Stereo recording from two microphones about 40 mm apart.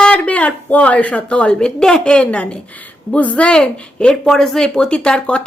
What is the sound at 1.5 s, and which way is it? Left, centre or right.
Speech, centre.